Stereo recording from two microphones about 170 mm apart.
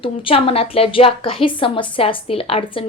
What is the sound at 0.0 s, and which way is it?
A woman's voice, 35° left (ahead or behind).